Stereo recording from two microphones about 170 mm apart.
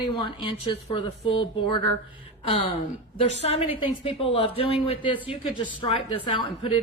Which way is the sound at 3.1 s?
40° left (ahead or behind).